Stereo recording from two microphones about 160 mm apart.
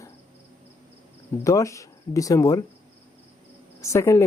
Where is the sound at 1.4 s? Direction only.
20° left (ahead or behind).